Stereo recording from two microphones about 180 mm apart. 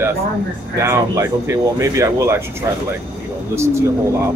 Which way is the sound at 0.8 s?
15° right (ahead or behind).